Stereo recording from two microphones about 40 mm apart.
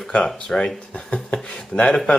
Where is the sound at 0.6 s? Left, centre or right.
Left.